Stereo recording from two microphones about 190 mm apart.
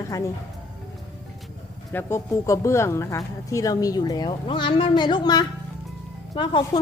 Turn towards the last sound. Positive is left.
turn(degrees=25)  # may be behind; listen again after turning